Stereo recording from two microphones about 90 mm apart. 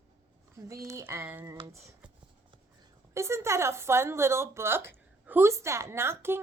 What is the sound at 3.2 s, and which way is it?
A woman's voice, 30° right (ahead or behind).